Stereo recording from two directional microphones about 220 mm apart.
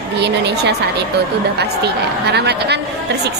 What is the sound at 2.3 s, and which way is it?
Speech, 50° right (ahead or behind).